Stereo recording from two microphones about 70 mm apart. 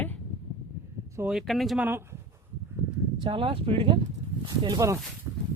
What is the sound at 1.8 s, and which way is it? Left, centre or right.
Speech, right.